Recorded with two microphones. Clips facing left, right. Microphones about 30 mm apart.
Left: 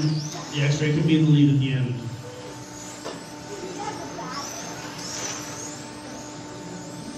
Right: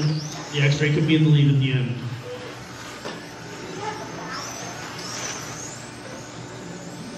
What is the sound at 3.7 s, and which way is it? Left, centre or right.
Vehicle, centre.